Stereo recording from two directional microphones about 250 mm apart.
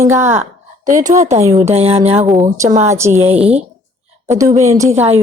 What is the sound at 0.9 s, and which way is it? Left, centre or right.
Speech, right.